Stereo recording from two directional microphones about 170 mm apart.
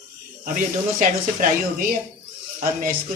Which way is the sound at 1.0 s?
55° right (ahead or behind).